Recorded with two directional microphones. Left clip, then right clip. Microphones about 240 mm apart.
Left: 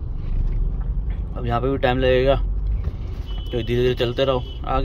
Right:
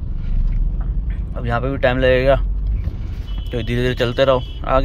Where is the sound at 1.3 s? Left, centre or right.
Centre.